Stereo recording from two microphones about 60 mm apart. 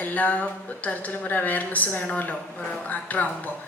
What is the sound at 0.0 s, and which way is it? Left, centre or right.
A woman's voice, left.